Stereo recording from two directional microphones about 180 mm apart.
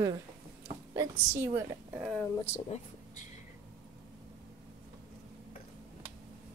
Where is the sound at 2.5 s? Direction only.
35° left (ahead or behind).